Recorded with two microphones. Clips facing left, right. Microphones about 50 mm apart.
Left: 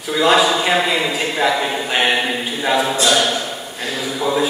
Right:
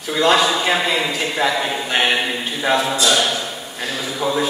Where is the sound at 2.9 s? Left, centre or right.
Left.